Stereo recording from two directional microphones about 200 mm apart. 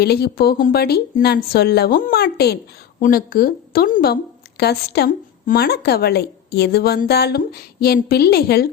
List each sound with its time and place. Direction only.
0.0 s speech: 50° left (ahead or behind)